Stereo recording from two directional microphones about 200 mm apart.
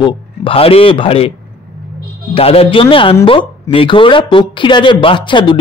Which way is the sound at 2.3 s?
30° left (ahead or behind).